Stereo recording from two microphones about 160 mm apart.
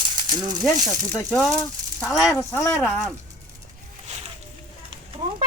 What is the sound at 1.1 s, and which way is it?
Speech, 5° left (ahead or behind).